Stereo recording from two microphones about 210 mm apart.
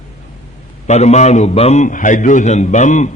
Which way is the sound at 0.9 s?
35° left (ahead or behind).